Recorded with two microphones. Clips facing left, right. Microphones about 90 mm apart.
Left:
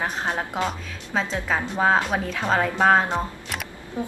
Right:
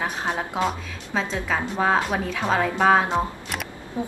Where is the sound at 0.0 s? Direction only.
5° right (ahead or behind).